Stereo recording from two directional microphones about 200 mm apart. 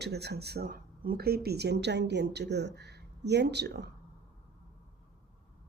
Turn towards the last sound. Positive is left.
turn(degrees=-55)  # may be behind; listen again after turning